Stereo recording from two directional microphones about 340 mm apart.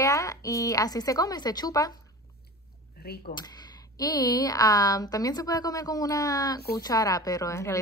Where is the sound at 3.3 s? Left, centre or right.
Centre.